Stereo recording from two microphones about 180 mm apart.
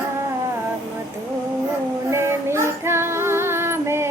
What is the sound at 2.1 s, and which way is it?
Female singing, 15° right (ahead or behind).